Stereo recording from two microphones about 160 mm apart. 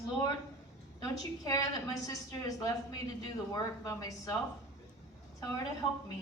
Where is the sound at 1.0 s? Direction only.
20° left (ahead or behind).